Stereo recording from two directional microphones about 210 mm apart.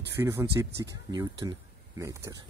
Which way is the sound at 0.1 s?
10° right (ahead or behind).